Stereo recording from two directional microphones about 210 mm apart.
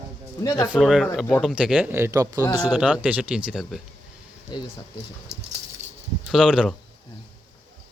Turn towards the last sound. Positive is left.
turn(degrees=-5)  # may be behind; listen again after turning